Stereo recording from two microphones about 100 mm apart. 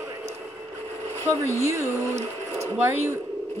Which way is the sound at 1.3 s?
25° right (ahead or behind).